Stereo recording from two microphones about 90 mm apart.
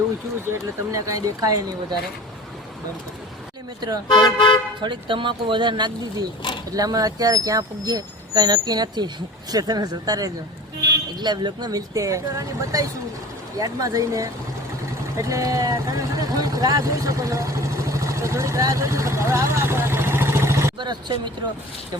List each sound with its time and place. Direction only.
0.9 s speech: 40° right (ahead or behind)
3.8 s speech: 45° right (ahead or behind)
4.1 s speech: 60° left (ahead or behind)
4.8 s speech: 65° right (ahead or behind)
6.7 s speech: 45° right (ahead or behind)
20.7 s speech: 55° right (ahead or behind)